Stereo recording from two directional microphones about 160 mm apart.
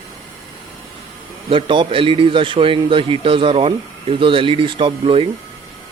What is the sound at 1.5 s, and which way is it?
Speech, 30° right (ahead or behind).